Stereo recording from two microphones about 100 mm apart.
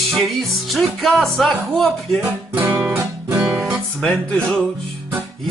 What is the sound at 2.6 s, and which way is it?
Guitar, 20° right (ahead or behind).